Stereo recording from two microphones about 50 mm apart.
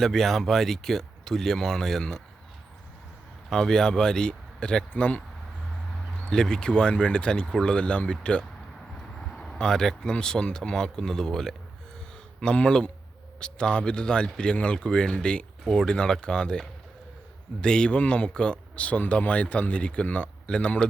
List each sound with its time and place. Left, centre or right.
0.0 s speech: centre
3.5 s speech: centre
6.3 s speech: centre
12.4 s speech: centre